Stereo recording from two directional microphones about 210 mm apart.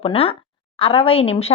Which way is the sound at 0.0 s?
25° left (ahead or behind).